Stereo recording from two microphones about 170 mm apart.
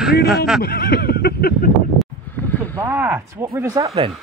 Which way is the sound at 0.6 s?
70° left (ahead or behind).